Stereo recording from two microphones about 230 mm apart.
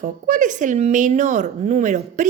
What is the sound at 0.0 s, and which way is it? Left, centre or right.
A woman's voice, right.